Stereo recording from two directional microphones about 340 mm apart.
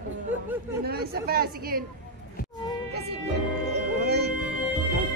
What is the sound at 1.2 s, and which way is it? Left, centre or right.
Speech, right.